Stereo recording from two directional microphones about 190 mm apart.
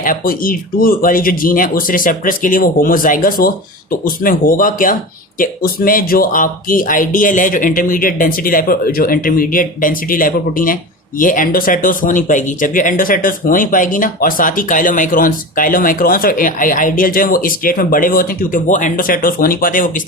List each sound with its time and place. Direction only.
0.0 s speech: 50° left (ahead or behind)